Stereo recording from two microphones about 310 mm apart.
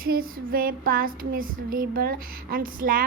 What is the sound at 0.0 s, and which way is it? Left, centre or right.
Speech, right.